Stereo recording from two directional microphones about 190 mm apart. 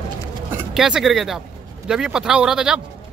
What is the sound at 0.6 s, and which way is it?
Speech, 5° right (ahead or behind).